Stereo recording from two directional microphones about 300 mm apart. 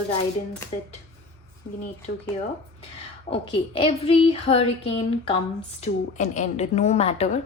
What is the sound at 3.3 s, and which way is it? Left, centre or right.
A woman's voice, centre.